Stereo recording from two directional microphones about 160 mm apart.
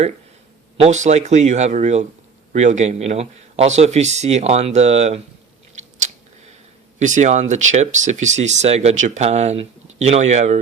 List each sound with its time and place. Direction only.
0.8 s speech: 50° right (ahead or behind)
7.0 s speech: 50° right (ahead or behind)